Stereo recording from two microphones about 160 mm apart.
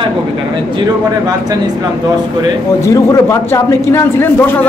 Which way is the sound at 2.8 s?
20° left (ahead or behind).